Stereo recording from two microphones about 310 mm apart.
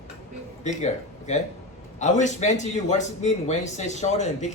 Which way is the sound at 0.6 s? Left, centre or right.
Left.